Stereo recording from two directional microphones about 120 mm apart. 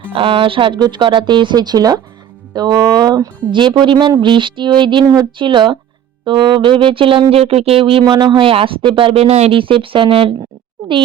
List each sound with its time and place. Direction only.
0.1 s speech: 50° right (ahead or behind)
9.6 s speech: 45° right (ahead or behind)